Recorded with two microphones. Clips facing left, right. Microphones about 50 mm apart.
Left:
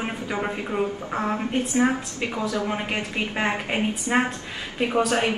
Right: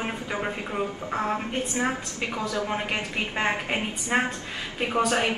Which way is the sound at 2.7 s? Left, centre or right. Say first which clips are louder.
Left 1 dB; centre.